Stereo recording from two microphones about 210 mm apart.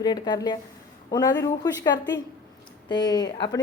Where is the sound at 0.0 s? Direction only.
20° left (ahead or behind).